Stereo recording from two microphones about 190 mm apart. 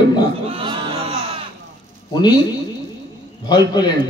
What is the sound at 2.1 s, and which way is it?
Speech, 20° left (ahead or behind).